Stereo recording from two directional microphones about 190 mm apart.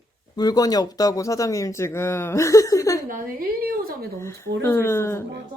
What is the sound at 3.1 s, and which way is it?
Speech, 45° right (ahead or behind).